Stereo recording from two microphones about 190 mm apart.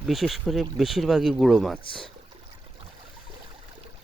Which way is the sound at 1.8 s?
25° left (ahead or behind).